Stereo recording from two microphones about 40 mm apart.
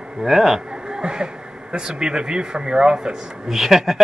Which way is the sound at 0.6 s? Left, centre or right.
Right.